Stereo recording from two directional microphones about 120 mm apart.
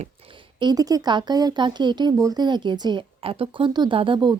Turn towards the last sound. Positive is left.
turn(degrees=-40)  # may be behind; listen again after turning